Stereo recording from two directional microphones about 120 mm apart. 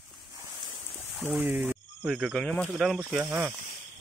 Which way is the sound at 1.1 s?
5° right (ahead or behind).